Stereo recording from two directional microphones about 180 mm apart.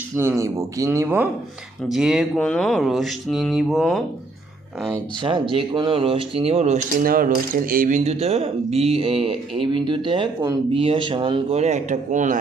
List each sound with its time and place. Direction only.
0.2 s speech: 15° right (ahead or behind); by 4.0 s centre (ahead or behind)
5.2 s speech: 30° right (ahead or behind)
7.0 s speech: 50° right (ahead or behind)